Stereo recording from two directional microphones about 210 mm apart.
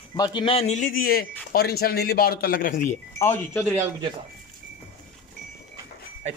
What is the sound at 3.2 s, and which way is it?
Speech, 10° left (ahead or behind).